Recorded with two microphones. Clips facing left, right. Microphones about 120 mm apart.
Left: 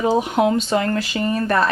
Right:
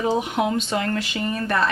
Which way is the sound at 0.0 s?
35° left (ahead or behind).